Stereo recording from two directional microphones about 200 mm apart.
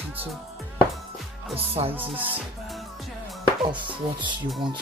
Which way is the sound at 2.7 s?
Centre (ahead or behind).